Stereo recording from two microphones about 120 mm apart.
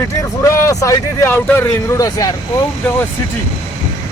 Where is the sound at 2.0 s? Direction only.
30° left (ahead or behind).